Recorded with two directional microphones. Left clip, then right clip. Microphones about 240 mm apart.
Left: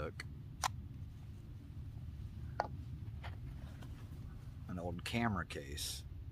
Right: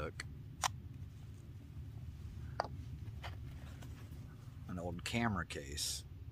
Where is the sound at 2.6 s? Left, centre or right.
Centre.